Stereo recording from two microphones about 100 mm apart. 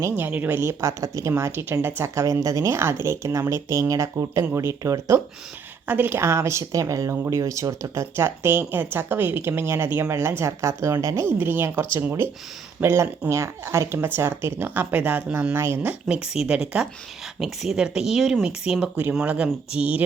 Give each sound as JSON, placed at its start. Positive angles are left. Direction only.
{"t": 0.1, "sound": "speech", "side_deg": -15}
{"t": 5.9, "sound": "speech", "side_deg": -20}
{"t": 15.8, "sound": "speech", "side_deg": -15}